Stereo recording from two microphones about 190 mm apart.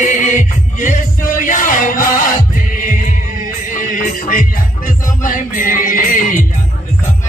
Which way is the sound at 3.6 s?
45° left (ahead or behind).